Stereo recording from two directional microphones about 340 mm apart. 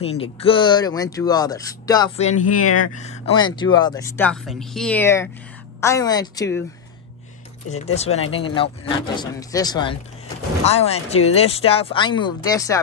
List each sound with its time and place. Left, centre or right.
0.0 s speech: centre
7.7 s speech: centre